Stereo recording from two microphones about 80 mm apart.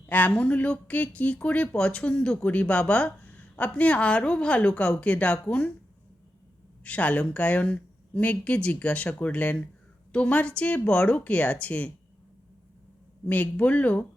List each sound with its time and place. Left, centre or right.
0.0 s speech: left
6.8 s speech: centre
13.2 s speech: left